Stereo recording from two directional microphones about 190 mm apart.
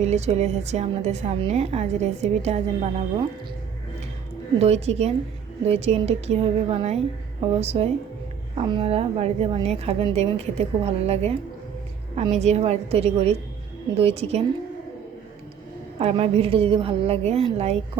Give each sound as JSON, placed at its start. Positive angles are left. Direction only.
{"t": 0.0, "sound": "a woman's voice", "side_deg": -35}
{"t": 4.5, "sound": "a woman's voice", "side_deg": -35}
{"t": 16.0, "sound": "a woman's voice", "side_deg": -35}